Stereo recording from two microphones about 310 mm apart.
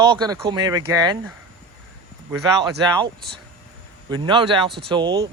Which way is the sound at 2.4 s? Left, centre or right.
Centre.